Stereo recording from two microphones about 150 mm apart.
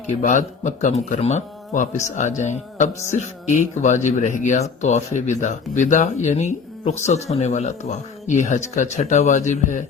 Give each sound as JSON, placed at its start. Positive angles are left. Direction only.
{"t": 0.1, "sound": "speech", "side_deg": 55}